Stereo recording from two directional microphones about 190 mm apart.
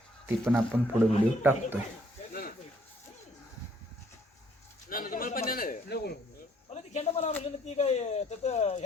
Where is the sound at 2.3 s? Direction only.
50° left (ahead or behind).